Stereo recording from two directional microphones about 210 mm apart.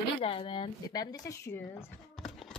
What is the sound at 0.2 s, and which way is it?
Speech, 25° left (ahead or behind).